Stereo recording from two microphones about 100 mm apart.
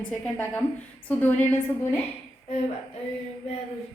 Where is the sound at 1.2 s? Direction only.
15° left (ahead or behind).